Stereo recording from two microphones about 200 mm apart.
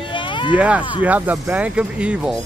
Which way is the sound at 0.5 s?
5° right (ahead or behind).